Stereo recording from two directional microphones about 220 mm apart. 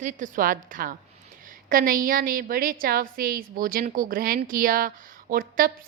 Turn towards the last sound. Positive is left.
turn(degrees=-40)  # may be behind; listen again after turning